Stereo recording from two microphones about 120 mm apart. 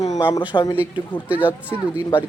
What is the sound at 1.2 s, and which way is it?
Speech, 15° right (ahead or behind).